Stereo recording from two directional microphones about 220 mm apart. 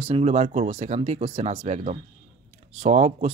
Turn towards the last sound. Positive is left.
turn(degrees=-30)  # may be behind; listen again after turning